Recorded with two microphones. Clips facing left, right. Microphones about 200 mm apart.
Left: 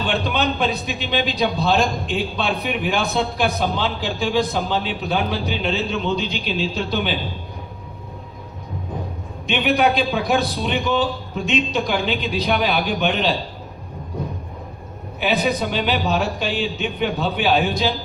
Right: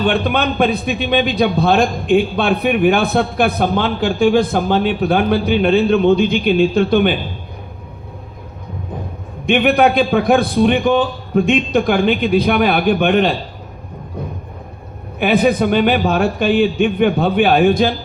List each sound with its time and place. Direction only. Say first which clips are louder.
0.0 s a man's voice: right 5 dB; 55° right (ahead or behind)
9.5 s a man's voice: right 6 dB; 55° right (ahead or behind)
15.2 s a man's voice: right 7 dB; 55° right (ahead or behind)